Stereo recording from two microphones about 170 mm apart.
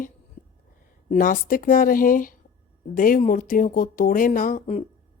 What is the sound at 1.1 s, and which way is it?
Speech, 55° left (ahead or behind).